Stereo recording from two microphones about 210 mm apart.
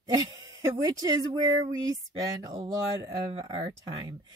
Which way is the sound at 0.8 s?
15° right (ahead or behind).